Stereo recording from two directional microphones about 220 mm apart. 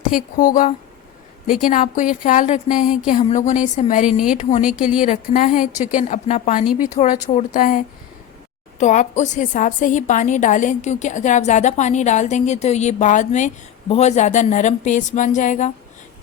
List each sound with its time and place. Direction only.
0.1 s a woman's voice: 40° left (ahead or behind)
4.6 s a woman's voice: 5° right (ahead or behind)
5.0 s a woman's voice: 40° left (ahead or behind)